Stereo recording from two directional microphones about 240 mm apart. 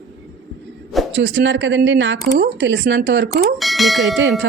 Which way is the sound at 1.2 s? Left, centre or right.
Right.